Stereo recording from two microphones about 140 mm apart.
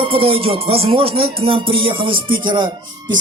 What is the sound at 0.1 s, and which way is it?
Music, 40° right (ahead or behind).